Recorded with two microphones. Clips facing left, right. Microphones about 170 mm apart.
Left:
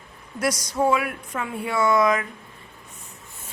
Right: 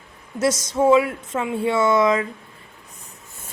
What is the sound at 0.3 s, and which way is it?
A woman's voice, 25° right (ahead or behind).